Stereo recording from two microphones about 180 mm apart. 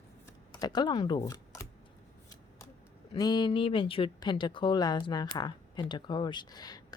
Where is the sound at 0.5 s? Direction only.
25° left (ahead or behind).